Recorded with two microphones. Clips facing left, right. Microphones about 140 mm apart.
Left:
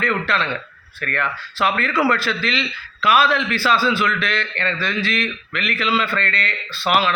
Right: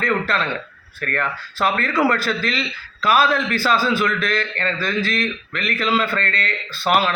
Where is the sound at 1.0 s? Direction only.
40° right (ahead or behind).